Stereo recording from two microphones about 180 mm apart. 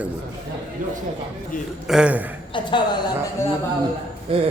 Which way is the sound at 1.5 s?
50° left (ahead or behind).